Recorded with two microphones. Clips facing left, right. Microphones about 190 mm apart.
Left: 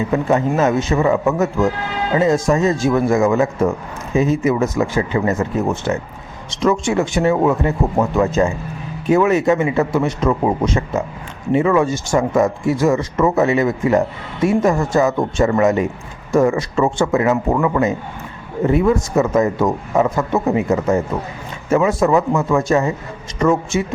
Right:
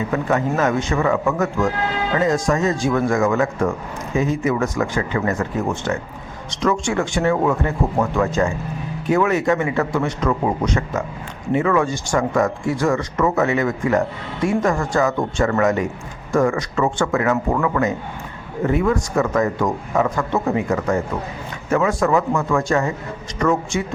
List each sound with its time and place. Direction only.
0.1 s speech: 25° left (ahead or behind)